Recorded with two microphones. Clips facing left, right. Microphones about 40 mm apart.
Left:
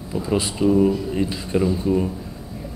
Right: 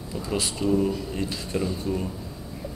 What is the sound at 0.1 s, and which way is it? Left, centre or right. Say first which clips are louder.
A man's voice: left 6 dB; centre.